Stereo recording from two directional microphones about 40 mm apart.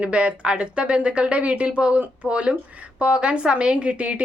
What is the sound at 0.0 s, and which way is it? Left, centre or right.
A woman's voice, right.